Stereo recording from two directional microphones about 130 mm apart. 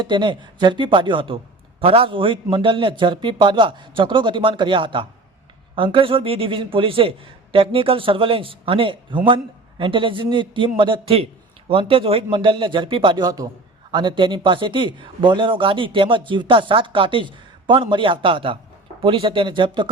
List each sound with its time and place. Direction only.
0.0 s speech: 40° right (ahead or behind)